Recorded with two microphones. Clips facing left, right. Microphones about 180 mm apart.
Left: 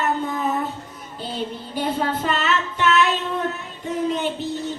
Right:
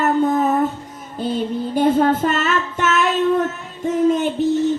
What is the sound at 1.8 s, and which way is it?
Child singing, 45° right (ahead or behind).